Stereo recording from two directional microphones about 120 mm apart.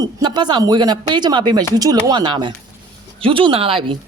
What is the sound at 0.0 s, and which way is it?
Speech, 35° right (ahead or behind).